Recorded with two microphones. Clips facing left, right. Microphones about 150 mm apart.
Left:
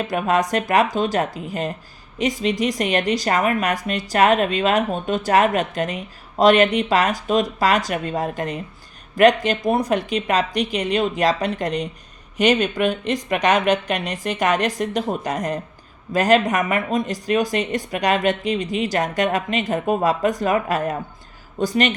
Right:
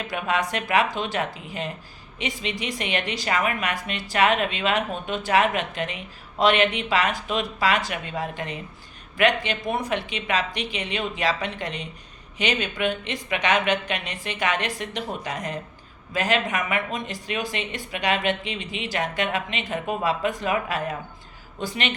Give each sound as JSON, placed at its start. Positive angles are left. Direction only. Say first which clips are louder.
{"t": 0.1, "sound": "a woman's voice", "louder": "left 5 dB", "side_deg": 40}